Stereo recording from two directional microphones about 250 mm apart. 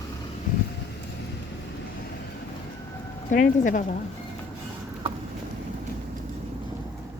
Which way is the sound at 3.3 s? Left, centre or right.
Left.